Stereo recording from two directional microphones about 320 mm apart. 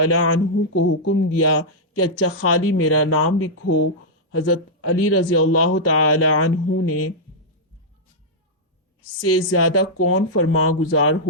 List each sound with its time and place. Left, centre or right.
0.0 s speech: left
9.2 s speech: left